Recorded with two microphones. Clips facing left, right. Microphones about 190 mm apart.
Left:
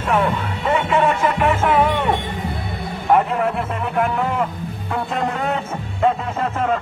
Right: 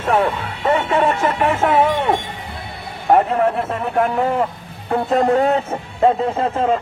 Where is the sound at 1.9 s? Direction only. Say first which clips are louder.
Right 1 dB; 45° right (ahead or behind).